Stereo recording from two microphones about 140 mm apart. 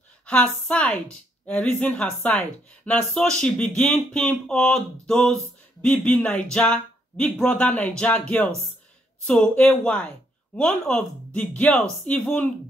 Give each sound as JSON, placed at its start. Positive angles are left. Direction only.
{"t": 0.3, "sound": "speech", "side_deg": 10}